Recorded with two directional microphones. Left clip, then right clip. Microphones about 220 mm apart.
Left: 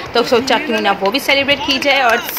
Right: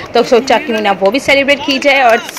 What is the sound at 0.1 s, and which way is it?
Speech, 20° right (ahead or behind).